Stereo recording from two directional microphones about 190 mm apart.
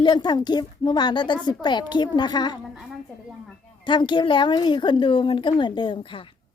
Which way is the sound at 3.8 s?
25° left (ahead or behind).